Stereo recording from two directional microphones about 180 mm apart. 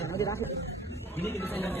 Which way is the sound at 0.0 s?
15° left (ahead or behind).